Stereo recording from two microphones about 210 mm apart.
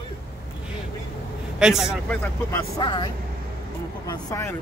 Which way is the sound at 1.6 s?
5° right (ahead or behind).